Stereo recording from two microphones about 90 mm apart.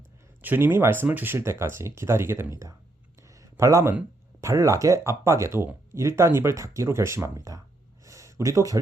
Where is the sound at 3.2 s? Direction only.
35° right (ahead or behind).